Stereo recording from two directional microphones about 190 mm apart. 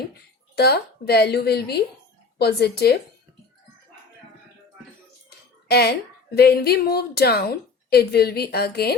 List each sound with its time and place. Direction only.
0.5 s a woman's voice: 55° left (ahead or behind)
5.6 s a woman's voice: 55° left (ahead or behind)